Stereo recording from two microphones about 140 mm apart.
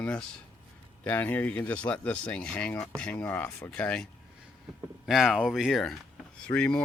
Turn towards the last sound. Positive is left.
turn(degrees=5)  # may be behind; listen again after turning